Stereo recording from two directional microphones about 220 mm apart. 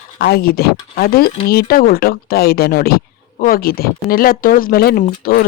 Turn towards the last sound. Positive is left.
turn(degrees=40)  # may be behind; listen again after turning